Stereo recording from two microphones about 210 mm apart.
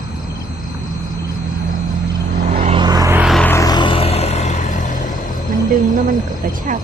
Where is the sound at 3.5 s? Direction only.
15° left (ahead or behind); by 4.7 s 35° left (ahead or behind).